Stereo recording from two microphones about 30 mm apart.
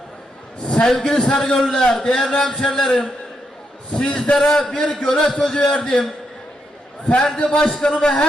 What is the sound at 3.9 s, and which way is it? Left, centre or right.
Speech, left.